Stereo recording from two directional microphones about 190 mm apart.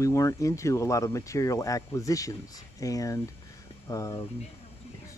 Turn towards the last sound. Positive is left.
turn(degrees=15)  # may be behind; listen again after turning